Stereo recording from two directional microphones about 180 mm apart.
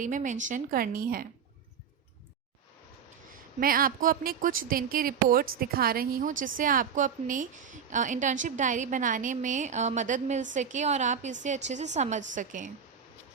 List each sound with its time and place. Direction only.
0.0 s a woman's voice: 45° right (ahead or behind)
3.6 s a woman's voice: 55° right (ahead or behind)